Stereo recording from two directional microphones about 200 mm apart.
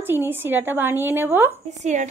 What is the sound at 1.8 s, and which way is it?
Speech, 35° right (ahead or behind).